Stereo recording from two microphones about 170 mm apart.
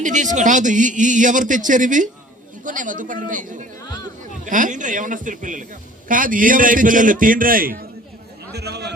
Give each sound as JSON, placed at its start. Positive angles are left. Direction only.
{"t": 0.0, "sound": "speech", "side_deg": -45}
{"t": 8.5, "sound": "a man's voice", "side_deg": -75}